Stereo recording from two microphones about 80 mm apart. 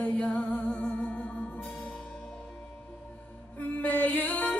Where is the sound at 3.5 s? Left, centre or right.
Centre.